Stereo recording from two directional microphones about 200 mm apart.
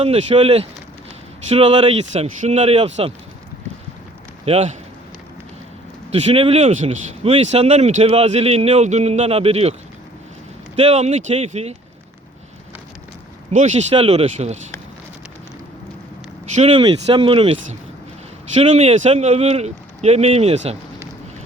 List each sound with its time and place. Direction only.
0.0 s speech: 30° right (ahead or behind)
4.4 s speech: 30° right (ahead or behind)
6.1 s speech: 30° right (ahead or behind)
10.8 s speech: 30° right (ahead or behind)
13.5 s speech: 35° right (ahead or behind)
16.6 s speech: 30° right (ahead or behind)